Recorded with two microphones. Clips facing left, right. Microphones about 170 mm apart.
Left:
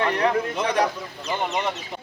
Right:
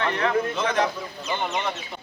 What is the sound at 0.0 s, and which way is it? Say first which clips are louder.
Speech: left 2 dB; 15° left (ahead or behind).